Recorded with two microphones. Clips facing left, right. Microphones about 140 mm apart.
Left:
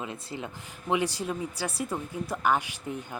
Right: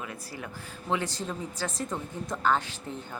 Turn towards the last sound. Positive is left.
turn(degrees=15)  # may be behind; listen again after turning